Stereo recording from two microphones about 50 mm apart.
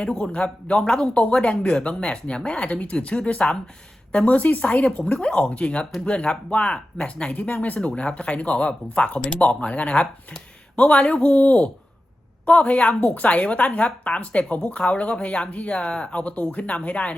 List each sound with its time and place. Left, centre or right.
0.0 s a woman's voice: centre
5.2 s a woman's voice: centre
7.3 s a woman's voice: left